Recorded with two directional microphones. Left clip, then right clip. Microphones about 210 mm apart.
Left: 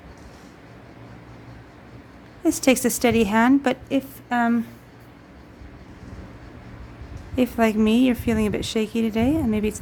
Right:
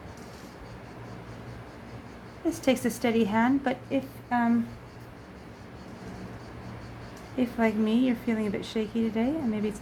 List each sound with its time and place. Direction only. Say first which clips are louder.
2.4 s a woman's voice: left 7 dB; 45° left (ahead or behind)
7.3 s a woman's voice: left 6 dB; 45° left (ahead or behind)